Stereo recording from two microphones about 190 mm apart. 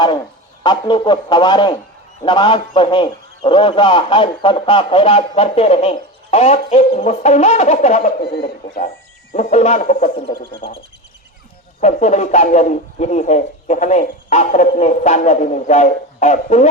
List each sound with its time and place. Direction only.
0.9 s speech: 25° left (ahead or behind)
8.2 s a man's voice: 55° left (ahead or behind)
9.3 s speech: 35° left (ahead or behind)
11.8 s speech: 40° left (ahead or behind)